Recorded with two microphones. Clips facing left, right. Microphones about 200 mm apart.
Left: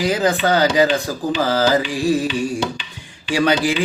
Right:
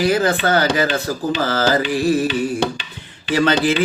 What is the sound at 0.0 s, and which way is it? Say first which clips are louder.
Speech: right 1 dB; 15° left (ahead or behind).